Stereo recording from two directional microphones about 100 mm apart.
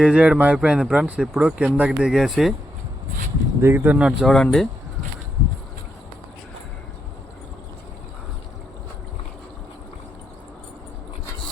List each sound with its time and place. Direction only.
0.0 s speech: 10° right (ahead or behind)
3.6 s speech: 25° right (ahead or behind)
3.9 s speech: 5° right (ahead or behind)
4.3 s speech: 5° left (ahead or behind)